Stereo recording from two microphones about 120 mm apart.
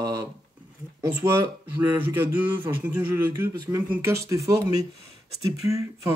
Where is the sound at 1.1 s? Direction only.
20° right (ahead or behind).